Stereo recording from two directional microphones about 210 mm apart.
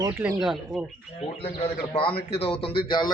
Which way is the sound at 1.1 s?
25° left (ahead or behind).